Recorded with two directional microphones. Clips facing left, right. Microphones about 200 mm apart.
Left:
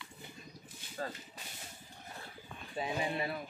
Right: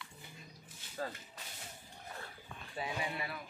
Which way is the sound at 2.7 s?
25° left (ahead or behind).